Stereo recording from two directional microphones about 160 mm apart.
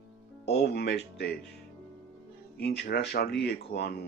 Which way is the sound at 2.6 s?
90° left.